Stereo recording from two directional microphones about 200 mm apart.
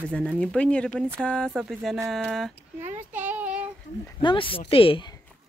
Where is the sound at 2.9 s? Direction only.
10° right (ahead or behind).